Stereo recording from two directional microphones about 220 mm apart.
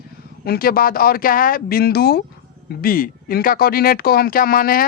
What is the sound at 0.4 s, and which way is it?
Speech, 45° left (ahead or behind).